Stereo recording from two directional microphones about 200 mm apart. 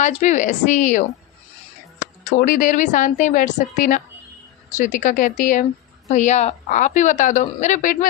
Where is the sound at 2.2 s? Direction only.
45° left (ahead or behind).